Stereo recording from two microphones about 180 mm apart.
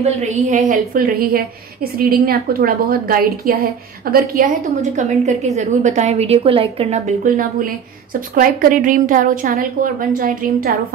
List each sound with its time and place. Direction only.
0.0 s a woman's voice: 40° right (ahead or behind)
0.9 s a woman's voice: 55° right (ahead or behind)
4.9 s a woman's voice: 40° right (ahead or behind)